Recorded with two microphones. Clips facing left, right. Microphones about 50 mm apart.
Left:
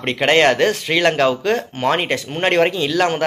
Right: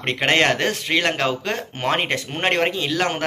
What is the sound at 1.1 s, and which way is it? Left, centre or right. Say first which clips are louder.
Speech: left 6 dB; centre.